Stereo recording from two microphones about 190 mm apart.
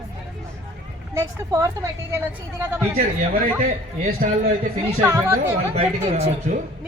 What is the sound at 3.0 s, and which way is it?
Speech, 50° right (ahead or behind).